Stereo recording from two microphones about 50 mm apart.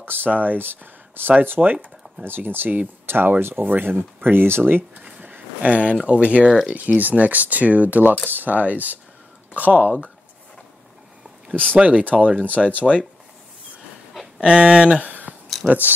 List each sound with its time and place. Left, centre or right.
0.0 s speech: right
4.9 s a sound: right
5.6 s speech: right
11.7 s speech: right
12.4 s speech: left
14.4 s speech: centre